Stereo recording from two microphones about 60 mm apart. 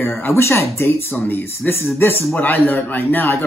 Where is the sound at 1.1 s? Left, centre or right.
Left.